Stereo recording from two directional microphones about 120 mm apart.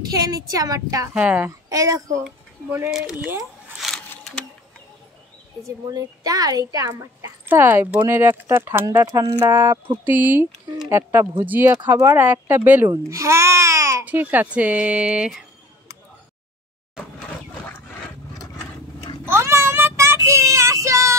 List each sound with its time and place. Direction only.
0.1 s speech: 30° right (ahead or behind)
1.1 s speech: 10° right (ahead or behind)
1.5 s speech: 30° right (ahead or behind)
2.9 s speech: 5° right (ahead or behind)
3.8 s a sound: centre (ahead or behind)
5.9 s speech: 30° right (ahead or behind)
10.0 s speech: 15° right (ahead or behind)
12.9 s babbling: 25° right (ahead or behind)
14.0 s speech: 15° right (ahead or behind)
18.4 s vehicle: 30° left (ahead or behind)
19.2 s a sound: 20° right (ahead or behind)
20.2 s child singing: 25° right (ahead or behind)